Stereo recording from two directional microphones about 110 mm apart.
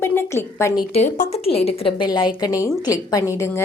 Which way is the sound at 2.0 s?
40° left (ahead or behind).